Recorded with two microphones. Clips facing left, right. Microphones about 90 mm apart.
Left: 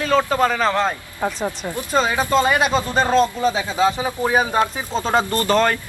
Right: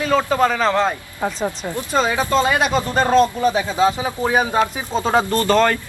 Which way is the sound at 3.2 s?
10° right (ahead or behind).